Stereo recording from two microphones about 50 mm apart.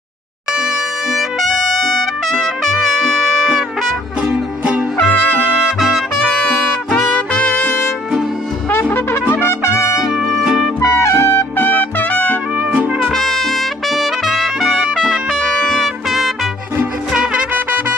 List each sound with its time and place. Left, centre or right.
1.1 s trumpet: centre
5.0 s trumpet: centre
6.3 s music: centre
7.1 s music: left
8.9 s trumpet: left
9.9 s music: centre
11.0 s trumpet: left
13.1 s trumpet: centre
15.3 s music: centre